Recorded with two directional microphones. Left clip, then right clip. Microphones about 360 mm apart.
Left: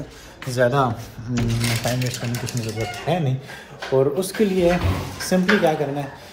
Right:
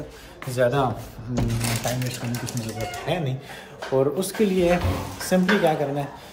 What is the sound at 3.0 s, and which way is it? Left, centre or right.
A man's voice, centre.